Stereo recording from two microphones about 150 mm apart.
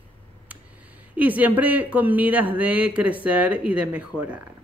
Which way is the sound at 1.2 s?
10° right (ahead or behind).